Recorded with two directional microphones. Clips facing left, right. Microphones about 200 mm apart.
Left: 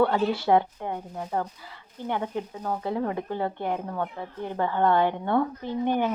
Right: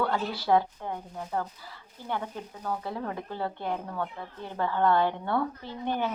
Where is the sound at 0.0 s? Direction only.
25° left (ahead or behind).